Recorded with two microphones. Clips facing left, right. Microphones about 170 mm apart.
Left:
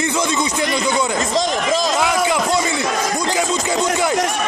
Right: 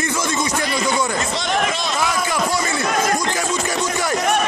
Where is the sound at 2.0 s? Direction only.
20° left (ahead or behind).